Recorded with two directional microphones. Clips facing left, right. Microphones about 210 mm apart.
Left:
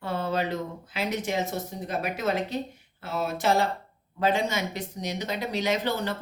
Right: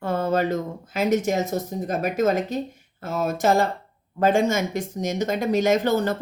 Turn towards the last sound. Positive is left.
turn(degrees=-45)  # may be behind; listen again after turning